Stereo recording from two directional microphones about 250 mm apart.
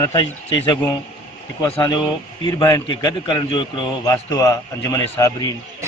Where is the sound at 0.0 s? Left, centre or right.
Centre.